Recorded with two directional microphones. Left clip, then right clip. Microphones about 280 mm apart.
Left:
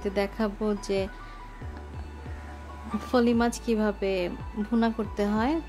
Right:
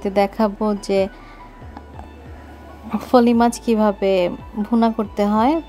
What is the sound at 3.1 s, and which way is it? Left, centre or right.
Speech, centre.